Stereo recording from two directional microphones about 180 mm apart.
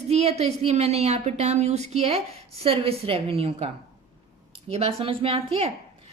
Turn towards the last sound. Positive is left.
turn(degrees=-30)  # may be behind; listen again after turning